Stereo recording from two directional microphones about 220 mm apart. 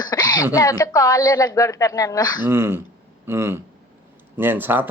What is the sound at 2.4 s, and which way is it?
Speech, 10° right (ahead or behind).